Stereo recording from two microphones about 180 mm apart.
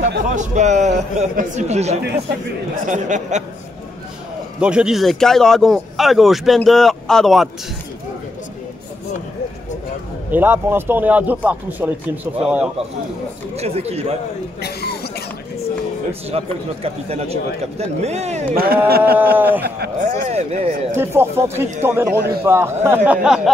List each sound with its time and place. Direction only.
0.4 s a man's voice: 40° right (ahead or behind)
4.6 s speech: 5° right (ahead or behind)
10.3 s a man's voice: 10° right (ahead or behind)
13.6 s a man's voice: 35° right (ahead or behind)
14.6 s cough: 60° left (ahead or behind)
16.1 s a man's voice: 35° right (ahead or behind)
18.5 s a sound: 55° right (ahead or behind)
19.3 s a man's voice: 10° right (ahead or behind)
20.0 s a man's voice: 40° right (ahead or behind)
20.9 s a man's voice: 15° right (ahead or behind)